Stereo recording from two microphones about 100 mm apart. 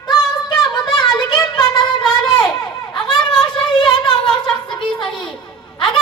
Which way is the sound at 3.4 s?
50° left (ahead or behind).